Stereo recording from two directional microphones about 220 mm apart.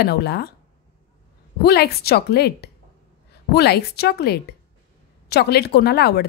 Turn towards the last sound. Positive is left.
turn(degrees=45)  # may be behind; listen again after turning